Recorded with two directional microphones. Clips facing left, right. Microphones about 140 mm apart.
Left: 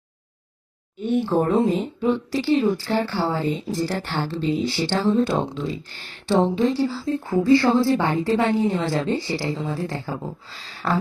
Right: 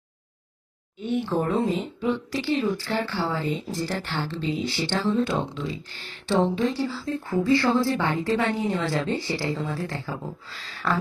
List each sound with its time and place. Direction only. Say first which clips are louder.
0.9 s a woman's voice: left 5 dB; 45° left (ahead or behind); by 10.2 s 25° left (ahead or behind)